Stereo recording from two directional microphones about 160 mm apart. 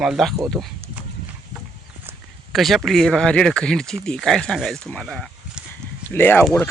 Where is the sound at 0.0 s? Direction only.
Centre (ahead or behind).